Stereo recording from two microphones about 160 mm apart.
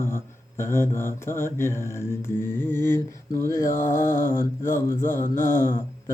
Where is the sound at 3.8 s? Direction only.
55° left (ahead or behind).